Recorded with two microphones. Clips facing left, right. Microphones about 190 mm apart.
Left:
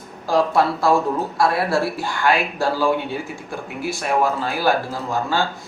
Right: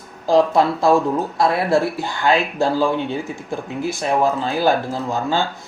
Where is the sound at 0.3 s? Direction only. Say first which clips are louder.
Right 3 dB; 20° right (ahead or behind).